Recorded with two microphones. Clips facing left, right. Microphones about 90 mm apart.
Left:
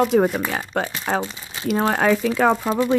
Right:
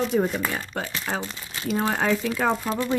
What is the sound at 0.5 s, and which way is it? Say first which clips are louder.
Speech: left 6 dB; 70° left (ahead or behind).